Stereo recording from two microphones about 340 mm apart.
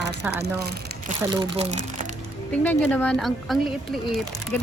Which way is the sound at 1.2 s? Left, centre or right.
Centre.